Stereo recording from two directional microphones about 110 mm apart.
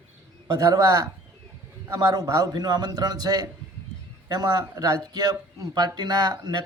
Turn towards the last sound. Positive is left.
turn(degrees=-40)  # may be behind; listen again after turning